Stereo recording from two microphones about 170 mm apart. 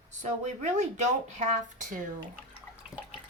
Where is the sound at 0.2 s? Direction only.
45° right (ahead or behind).